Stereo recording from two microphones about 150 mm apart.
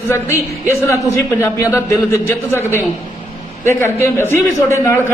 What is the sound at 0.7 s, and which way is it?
A man's voice, 20° left (ahead or behind).